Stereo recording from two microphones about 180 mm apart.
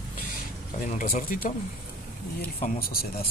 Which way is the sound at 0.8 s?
50° left (ahead or behind).